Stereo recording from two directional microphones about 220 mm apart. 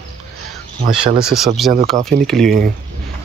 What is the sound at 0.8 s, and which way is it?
Mantra, 40° right (ahead or behind).